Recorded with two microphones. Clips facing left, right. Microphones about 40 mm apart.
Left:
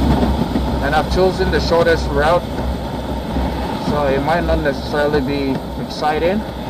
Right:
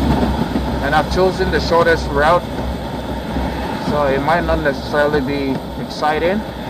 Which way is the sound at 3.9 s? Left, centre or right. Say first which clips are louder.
Right 1 dB; centre.